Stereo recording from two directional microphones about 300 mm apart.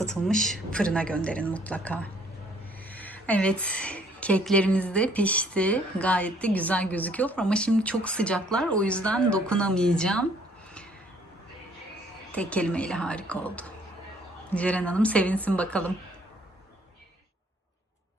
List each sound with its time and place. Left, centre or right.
0.0 s a woman's voice: centre
12.3 s a woman's voice: centre